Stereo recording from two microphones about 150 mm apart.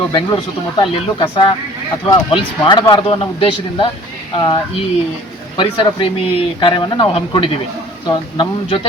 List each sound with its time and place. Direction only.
0.1 s speech: 30° left (ahead or behind)